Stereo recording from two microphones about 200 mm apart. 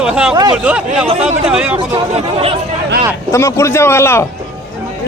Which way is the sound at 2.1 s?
30° right (ahead or behind).